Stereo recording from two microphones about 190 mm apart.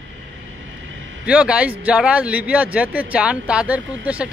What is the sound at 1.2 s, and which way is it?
A man's voice, 5° right (ahead or behind).